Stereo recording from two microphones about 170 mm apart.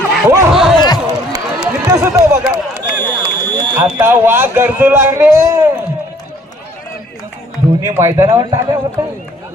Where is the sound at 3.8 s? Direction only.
10° right (ahead or behind).